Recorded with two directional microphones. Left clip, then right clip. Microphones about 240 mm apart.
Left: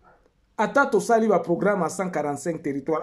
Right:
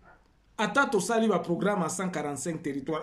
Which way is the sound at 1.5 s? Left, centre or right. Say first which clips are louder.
Left 6 dB; centre.